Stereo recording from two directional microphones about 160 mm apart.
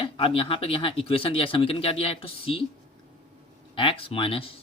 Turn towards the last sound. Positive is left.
turn(degrees=35)  # may be behind; listen again after turning